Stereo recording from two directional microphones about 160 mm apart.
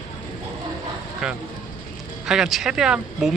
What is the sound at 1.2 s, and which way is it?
Speech, 5° right (ahead or behind).